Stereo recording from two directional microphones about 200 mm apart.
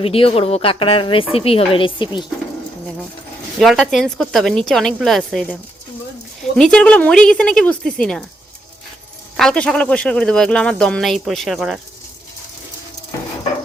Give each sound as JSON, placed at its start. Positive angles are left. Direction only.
{"t": 0.0, "sound": "a woman's voice", "side_deg": 30}
{"t": 3.6, "sound": "speech", "side_deg": 0}
{"t": 6.6, "sound": "speech", "side_deg": 5}
{"t": 9.4, "sound": "speech", "side_deg": 0}